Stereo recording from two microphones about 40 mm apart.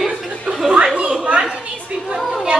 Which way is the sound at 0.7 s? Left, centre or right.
Right.